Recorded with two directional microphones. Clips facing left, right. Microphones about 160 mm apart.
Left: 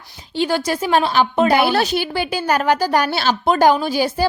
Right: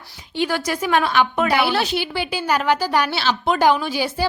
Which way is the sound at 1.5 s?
45° left (ahead or behind).